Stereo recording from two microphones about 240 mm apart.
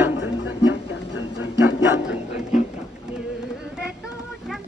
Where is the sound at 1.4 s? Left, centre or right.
Left.